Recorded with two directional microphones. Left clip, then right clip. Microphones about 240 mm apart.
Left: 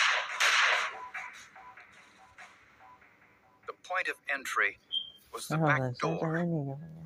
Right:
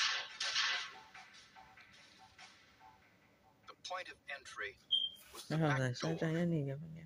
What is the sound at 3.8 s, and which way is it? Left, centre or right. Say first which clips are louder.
Speech: left 12 dB; left.